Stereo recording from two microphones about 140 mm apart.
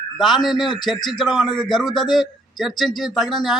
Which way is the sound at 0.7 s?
30° left (ahead or behind).